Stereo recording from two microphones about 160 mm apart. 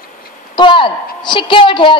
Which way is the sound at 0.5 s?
30° left (ahead or behind).